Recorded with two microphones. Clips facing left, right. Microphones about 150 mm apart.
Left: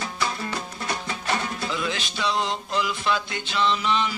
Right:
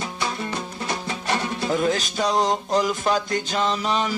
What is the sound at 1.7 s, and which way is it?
Music, 45° right (ahead or behind).